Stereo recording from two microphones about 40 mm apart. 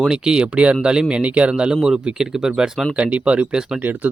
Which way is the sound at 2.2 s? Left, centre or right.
Centre.